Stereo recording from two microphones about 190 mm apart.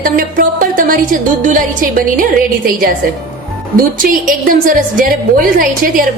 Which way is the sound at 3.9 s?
45° right (ahead or behind).